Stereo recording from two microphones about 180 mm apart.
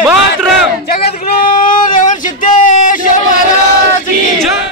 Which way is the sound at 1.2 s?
50° left (ahead or behind).